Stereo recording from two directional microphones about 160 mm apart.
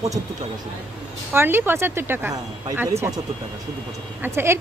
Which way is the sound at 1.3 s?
15° right (ahead or behind).